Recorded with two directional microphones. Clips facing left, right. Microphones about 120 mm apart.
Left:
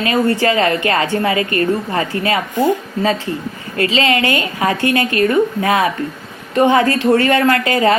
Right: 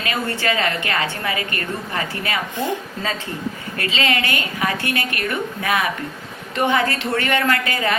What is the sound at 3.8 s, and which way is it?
A woman's voice, 30° left (ahead or behind).